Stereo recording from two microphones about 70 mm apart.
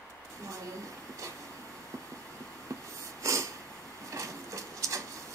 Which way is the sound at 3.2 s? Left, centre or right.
Right.